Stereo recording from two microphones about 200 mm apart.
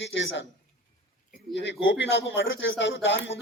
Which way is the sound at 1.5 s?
65° left (ahead or behind).